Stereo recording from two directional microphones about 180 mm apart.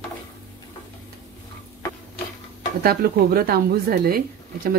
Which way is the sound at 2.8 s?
55° right (ahead or behind).